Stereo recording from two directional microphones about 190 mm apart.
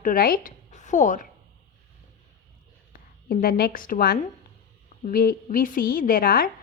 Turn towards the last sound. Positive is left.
turn(degrees=50)  # may be behind; listen again after turning